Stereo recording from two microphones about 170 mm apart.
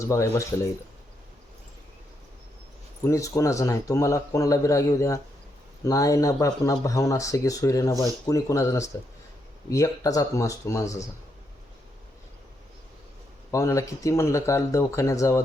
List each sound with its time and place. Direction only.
0.0 s speech: 20° left (ahead or behind)
3.0 s speech: 20° left (ahead or behind)
13.5 s speech: 20° left (ahead or behind)